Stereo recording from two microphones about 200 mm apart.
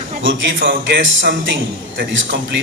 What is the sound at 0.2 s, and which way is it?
Speech, 70° right (ahead or behind).